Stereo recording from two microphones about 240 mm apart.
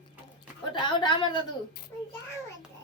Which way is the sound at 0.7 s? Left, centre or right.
Centre.